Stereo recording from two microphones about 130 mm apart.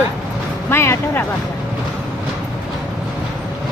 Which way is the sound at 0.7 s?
20° left (ahead or behind).